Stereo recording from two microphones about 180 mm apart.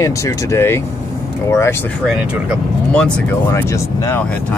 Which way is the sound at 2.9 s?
5° left (ahead or behind).